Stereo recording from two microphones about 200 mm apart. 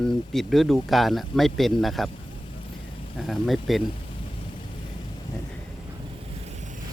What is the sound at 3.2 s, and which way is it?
Speech, centre (ahead or behind).